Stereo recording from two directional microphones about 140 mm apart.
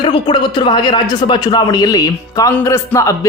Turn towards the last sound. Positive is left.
turn(degrees=20)  # may be behind; listen again after turning